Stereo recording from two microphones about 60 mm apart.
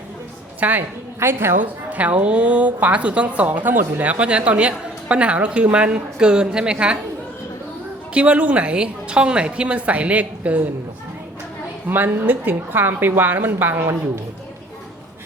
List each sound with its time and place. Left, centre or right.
0.6 s a woman's voice: right
1.2 s a woman's voice: right
1.6 s a woman's voice: right
8.1 s a woman's voice: right
11.9 s a woman's voice: right